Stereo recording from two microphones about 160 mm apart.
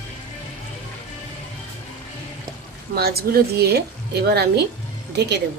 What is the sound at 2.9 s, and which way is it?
A woman's voice, 75° right (ahead or behind).